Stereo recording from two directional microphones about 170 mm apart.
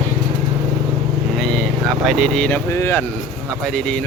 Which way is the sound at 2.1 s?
Centre (ahead or behind).